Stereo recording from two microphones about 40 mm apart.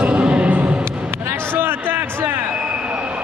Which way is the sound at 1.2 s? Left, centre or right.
Right.